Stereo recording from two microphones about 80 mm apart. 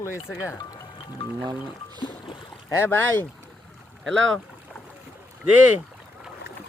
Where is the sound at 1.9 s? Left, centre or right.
Left.